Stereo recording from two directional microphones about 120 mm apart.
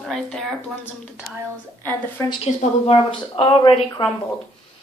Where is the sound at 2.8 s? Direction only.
50° left (ahead or behind).